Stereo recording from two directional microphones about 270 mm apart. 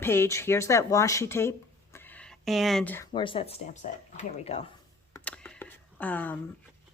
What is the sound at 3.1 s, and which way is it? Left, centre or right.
Speech, centre.